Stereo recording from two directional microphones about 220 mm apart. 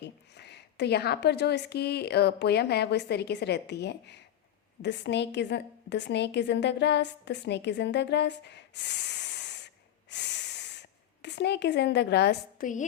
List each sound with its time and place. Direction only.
0.0 s a woman's voice: 50° left (ahead or behind)